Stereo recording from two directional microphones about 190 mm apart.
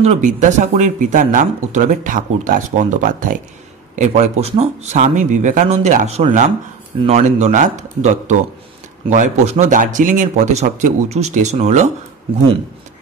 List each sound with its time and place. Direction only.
0.0 s speech: 35° right (ahead or behind)